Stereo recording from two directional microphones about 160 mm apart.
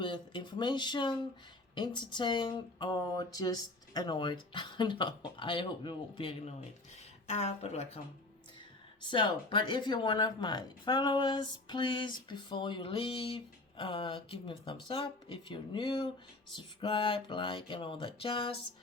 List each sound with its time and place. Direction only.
0.0 s speech: 30° left (ahead or behind)
9.0 s speech: 30° left (ahead or behind)
16.6 s music: 30° left (ahead or behind)